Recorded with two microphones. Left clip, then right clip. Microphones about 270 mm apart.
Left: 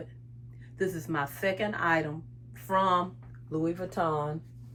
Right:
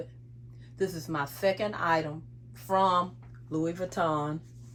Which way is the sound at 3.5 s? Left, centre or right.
Right.